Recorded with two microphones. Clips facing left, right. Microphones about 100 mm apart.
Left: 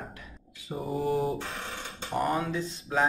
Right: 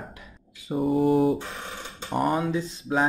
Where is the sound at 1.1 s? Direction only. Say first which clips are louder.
Right 7 dB; centre (ahead or behind).